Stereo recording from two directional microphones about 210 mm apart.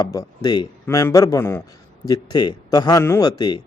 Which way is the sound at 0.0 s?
15° left (ahead or behind).